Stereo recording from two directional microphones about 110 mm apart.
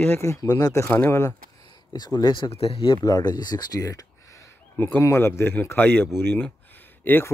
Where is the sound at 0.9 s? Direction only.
15° left (ahead or behind).